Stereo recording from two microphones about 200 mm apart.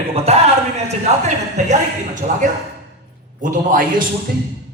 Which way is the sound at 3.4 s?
45° right (ahead or behind).